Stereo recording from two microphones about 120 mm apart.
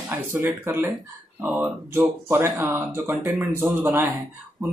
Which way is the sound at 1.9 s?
20° right (ahead or behind).